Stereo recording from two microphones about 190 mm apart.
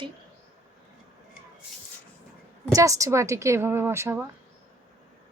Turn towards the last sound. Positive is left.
turn(degrees=-15)  # may be behind; listen again after turning